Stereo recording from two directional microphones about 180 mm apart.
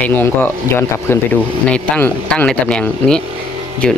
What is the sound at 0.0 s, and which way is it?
Speech, 10° left (ahead or behind).